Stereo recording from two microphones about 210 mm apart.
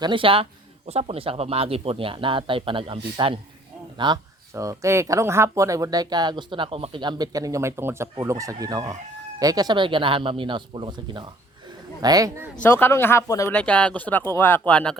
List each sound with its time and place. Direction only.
0.0 s speech: 25° right (ahead or behind)
12.6 s speech: 10° left (ahead or behind)